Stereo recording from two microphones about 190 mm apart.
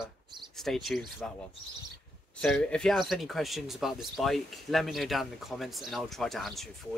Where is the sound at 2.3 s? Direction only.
5° left (ahead or behind).